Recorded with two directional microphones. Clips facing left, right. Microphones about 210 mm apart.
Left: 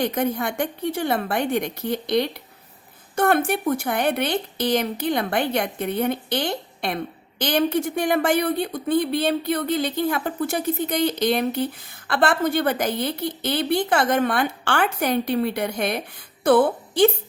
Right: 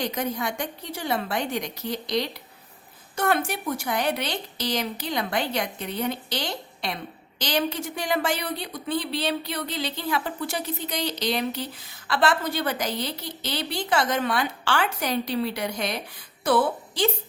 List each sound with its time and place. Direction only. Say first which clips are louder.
0.0 s a woman's voice: left 5 dB; 55° left (ahead or behind)